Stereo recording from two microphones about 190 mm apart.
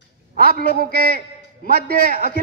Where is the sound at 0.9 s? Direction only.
55° left (ahead or behind).